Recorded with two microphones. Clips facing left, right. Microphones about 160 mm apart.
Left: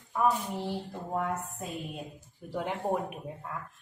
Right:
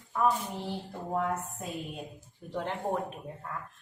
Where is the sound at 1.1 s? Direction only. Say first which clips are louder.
Right 1 dB; centre (ahead or behind).